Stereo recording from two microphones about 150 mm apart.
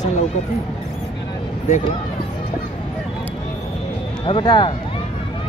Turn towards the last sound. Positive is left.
turn(degrees=30)  # may be behind; listen again after turning